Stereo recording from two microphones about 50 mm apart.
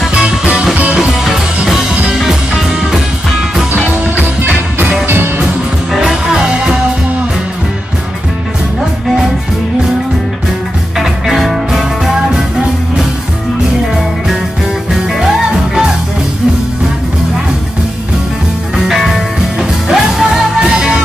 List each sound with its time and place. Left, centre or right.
4.2 s music: right
5.9 s music: centre
11.0 s music: centre
19.6 s music: centre